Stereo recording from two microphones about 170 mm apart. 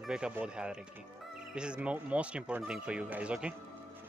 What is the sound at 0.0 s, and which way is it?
Speech, 5° right (ahead or behind).